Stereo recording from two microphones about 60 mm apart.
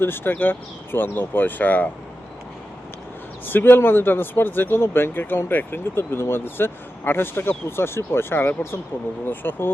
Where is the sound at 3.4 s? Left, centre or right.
Left.